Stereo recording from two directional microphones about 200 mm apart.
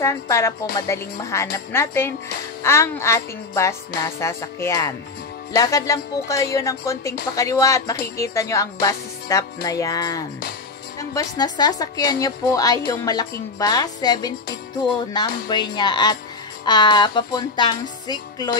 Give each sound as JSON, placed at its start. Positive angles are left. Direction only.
{"t": 0.0, "sound": "music", "side_deg": 15}
{"t": 11.0, "sound": "a woman's voice", "side_deg": 20}
{"t": 15.4, "sound": "a woman's voice", "side_deg": 20}